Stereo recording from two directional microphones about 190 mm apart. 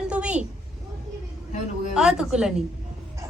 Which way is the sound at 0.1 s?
5° right (ahead or behind).